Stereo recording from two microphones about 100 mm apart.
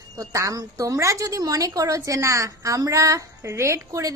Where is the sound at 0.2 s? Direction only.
35° right (ahead or behind).